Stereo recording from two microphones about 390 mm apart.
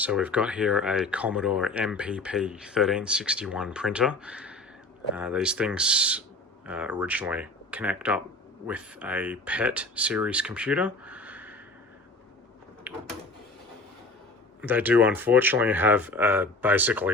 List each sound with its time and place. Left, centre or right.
0.0 s speech: centre
12.9 s a sound: centre
14.6 s speech: centre